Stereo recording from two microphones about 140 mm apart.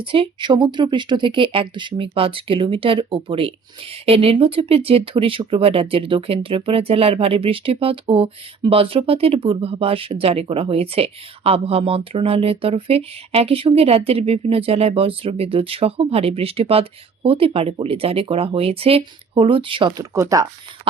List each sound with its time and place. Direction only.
0.0 s speech: 40° right (ahead or behind)
19.9 s speech: 25° right (ahead or behind)